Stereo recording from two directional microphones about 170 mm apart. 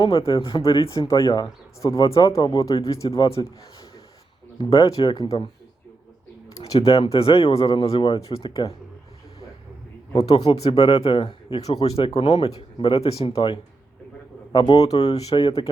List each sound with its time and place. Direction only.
0.0 s speech: 30° left (ahead or behind)
4.5 s speech: 30° left (ahead or behind)
6.6 s speech: 35° left (ahead or behind)
10.2 s speech: 35° left (ahead or behind)
11.6 s speech: 40° left (ahead or behind)